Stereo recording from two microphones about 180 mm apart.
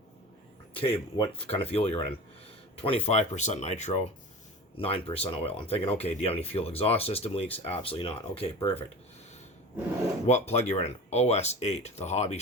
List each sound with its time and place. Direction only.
0.7 s speech: 30° left (ahead or behind)
10.2 s speech: 40° left (ahead or behind)